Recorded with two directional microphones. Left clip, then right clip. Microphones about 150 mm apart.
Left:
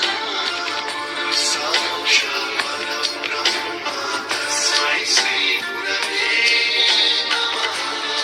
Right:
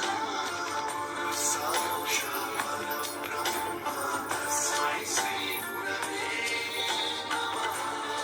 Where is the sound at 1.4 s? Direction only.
15° left (ahead or behind).